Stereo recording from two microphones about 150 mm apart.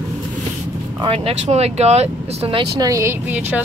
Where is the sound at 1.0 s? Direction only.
40° right (ahead or behind).